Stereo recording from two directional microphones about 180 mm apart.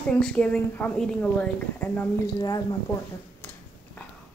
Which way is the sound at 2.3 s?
20° left (ahead or behind).